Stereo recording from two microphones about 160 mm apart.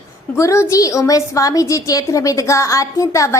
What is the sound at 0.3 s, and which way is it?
A woman's voice, 20° left (ahead or behind).